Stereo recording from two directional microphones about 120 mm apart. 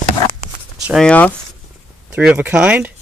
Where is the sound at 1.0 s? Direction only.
10° left (ahead or behind).